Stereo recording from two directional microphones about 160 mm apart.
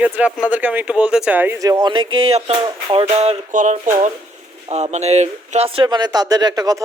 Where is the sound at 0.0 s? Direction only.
5° right (ahead or behind).